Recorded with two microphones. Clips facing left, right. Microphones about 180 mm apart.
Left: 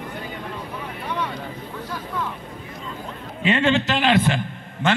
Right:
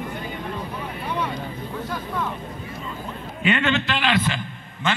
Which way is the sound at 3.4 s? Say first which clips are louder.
Left 3 dB; 30° left (ahead or behind).